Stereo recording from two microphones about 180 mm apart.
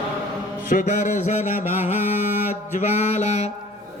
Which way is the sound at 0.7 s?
45° left (ahead or behind).